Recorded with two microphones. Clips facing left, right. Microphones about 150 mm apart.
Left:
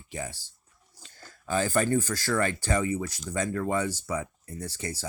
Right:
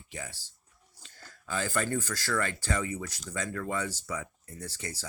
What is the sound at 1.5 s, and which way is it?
Speech, 50° left (ahead or behind).